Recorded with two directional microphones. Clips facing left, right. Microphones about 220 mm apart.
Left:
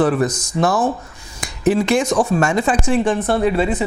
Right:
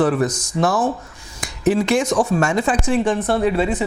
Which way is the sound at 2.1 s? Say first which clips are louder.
Left 1 dB; 25° left (ahead or behind).